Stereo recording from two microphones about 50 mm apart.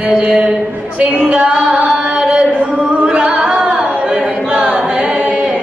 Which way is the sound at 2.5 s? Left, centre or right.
Right.